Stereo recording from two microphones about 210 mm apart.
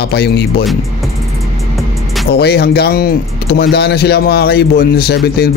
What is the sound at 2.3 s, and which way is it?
Speech, 50° left (ahead or behind).